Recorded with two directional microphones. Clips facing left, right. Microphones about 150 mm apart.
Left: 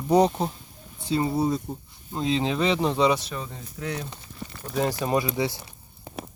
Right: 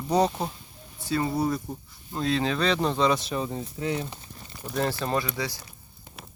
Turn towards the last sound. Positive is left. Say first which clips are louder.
# left 4 dB
turn(degrees=25)  # may be behind; listen again after turning